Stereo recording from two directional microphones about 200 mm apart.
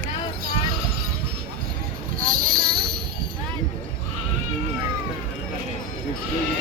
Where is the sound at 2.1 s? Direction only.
45° right (ahead or behind).